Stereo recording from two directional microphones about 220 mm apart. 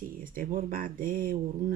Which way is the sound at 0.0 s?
40° right (ahead or behind).